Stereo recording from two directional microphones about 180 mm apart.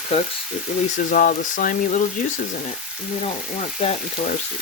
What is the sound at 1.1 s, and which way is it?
Speech, 50° left (ahead or behind).